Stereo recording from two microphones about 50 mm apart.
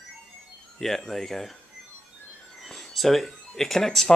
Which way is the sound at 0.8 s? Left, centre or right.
Centre.